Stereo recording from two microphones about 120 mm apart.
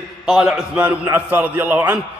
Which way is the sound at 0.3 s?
5° right (ahead or behind).